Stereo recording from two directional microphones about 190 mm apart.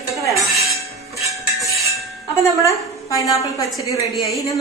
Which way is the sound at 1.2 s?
15° right (ahead or behind).